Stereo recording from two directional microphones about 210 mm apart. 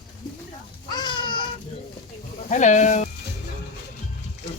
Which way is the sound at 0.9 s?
20° left (ahead or behind).